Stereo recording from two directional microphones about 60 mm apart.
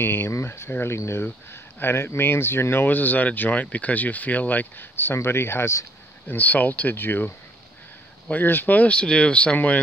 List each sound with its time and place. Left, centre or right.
0.0 s speech: left
0.3 s speech: left
1.2 s speech: left
4.9 s speech: left
6.2 s speech: left